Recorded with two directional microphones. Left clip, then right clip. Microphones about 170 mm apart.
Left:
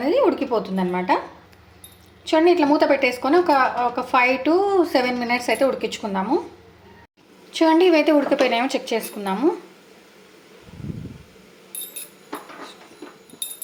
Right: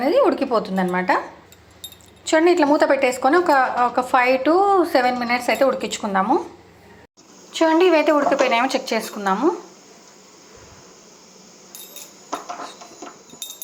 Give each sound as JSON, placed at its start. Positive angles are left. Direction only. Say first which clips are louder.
{"t": 0.0, "sound": "a woman's voice", "louder": "right 2 dB", "side_deg": 10}
{"t": 2.2, "sound": "a woman's voice", "louder": "right 1 dB", "side_deg": 0}
{"t": 7.5, "sound": "speech", "louder": "even", "side_deg": 30}